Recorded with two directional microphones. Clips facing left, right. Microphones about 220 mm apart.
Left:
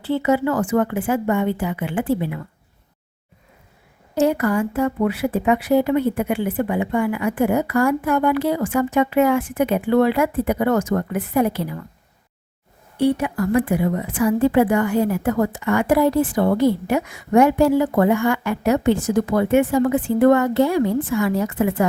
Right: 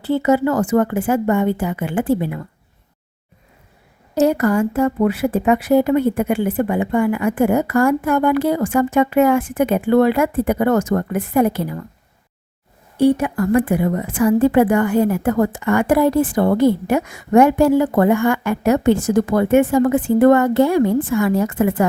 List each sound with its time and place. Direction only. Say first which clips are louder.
0.0 s a woman's voice: right 3 dB; 45° right (ahead or behind)
4.1 s a woman's voice: right 3 dB; 40° right (ahead or behind)
13.0 s a woman's voice: right 4 dB; 45° right (ahead or behind)